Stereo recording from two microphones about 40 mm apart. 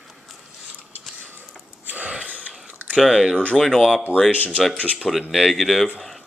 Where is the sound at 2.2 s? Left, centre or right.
Right.